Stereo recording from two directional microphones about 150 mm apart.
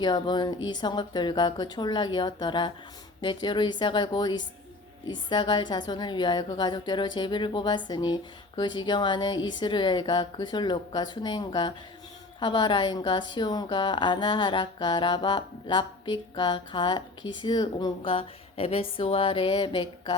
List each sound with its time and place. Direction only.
0.0 s a woman's voice: 30° left (ahead or behind)